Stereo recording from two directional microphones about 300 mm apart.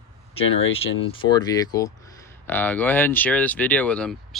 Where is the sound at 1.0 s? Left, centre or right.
Centre.